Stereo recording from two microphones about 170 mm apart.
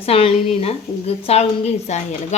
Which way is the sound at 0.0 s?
35° left (ahead or behind).